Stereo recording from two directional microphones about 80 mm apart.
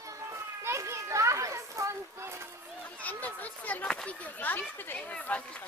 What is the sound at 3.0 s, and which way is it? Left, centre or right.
Speech, centre.